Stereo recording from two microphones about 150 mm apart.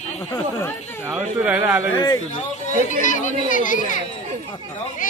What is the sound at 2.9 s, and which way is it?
Speech, 55° left (ahead or behind).